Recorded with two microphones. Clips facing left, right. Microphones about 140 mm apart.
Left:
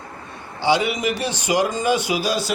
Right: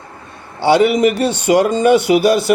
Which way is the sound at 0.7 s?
60° right (ahead or behind).